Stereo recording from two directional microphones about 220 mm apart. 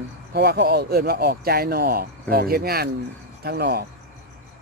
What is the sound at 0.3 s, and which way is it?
Speech, 50° right (ahead or behind).